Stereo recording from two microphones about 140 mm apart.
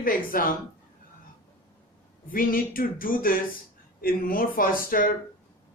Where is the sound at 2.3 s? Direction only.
90° left.